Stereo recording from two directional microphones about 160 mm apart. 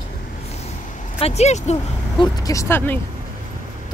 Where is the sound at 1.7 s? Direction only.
20° left (ahead or behind).